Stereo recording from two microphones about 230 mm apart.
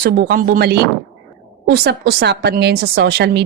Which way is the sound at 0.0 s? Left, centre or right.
Right.